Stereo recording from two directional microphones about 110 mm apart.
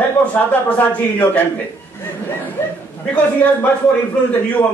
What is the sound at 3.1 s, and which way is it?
Speech, 15° left (ahead or behind).